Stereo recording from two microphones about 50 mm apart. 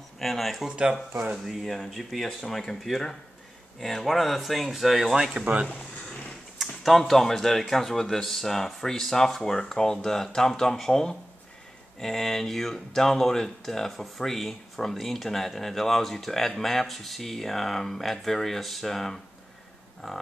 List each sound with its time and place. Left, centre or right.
0.2 s speech: centre
0.7 s speech: centre
1.3 s speech: centre; by 5.7 s right
6.6 s computer keyboard: centre
7.0 s speech: centre